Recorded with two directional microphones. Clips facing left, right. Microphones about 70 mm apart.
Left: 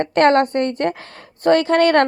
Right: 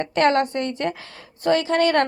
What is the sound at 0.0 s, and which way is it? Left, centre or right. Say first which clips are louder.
A woman's voice: left 5 dB; left.